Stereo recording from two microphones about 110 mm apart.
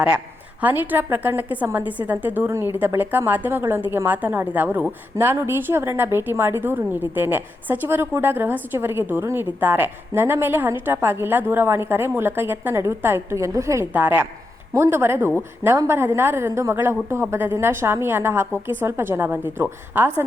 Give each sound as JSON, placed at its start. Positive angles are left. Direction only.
{"t": 0.6, "sound": "a woman's voice", "side_deg": -15}
{"t": 13.9, "sound": "a woman's voice", "side_deg": -15}